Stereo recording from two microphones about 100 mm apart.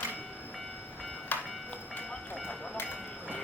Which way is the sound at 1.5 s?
Centre (ahead or behind).